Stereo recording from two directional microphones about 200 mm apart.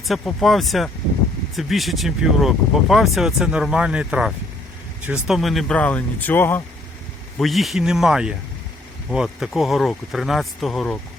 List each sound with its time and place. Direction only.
0.1 s speech: centre (ahead or behind)
7.3 s speech: centre (ahead or behind)